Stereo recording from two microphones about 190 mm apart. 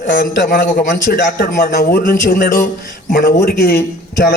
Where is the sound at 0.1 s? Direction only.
50° left (ahead or behind).